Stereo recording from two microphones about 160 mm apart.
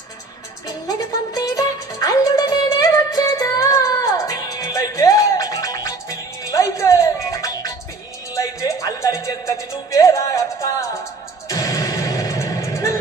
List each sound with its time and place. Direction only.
0.9 s music: 25° left (ahead or behind)